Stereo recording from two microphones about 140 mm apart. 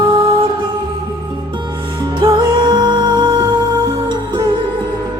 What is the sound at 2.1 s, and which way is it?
Music, 35° right (ahead or behind).